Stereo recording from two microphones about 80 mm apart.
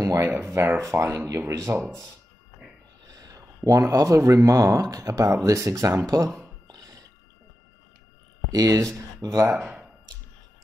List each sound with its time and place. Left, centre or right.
0.0 s speech: right
3.1 s speech: right
6.7 s music: right
8.5 s speech: right